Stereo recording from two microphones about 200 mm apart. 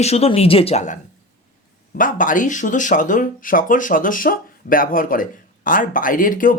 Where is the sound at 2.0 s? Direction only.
40° left (ahead or behind).